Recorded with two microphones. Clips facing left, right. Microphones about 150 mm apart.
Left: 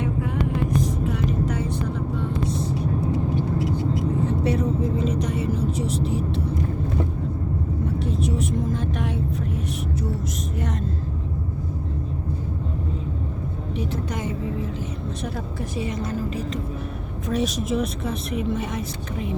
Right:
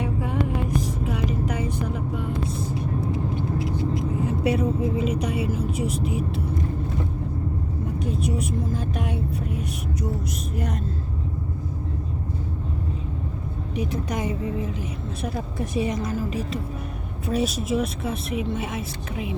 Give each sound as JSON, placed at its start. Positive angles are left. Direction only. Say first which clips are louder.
{"t": 0.7, "sound": "vehicle", "louder": "left 2 dB", "side_deg": -10}
{"t": 4.3, "sound": "a woman's voice", "louder": "even", "side_deg": -10}
{"t": 8.0, "sound": "vehicle", "louder": "right 1 dB", "side_deg": -10}
{"t": 14.1, "sound": "a sound", "louder": "right 1 dB", "side_deg": -15}
{"t": 15.5, "sound": "a woman's voice", "louder": "right 5 dB", "side_deg": -20}